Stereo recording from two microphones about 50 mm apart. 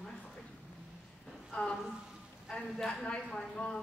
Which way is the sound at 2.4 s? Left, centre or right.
Centre.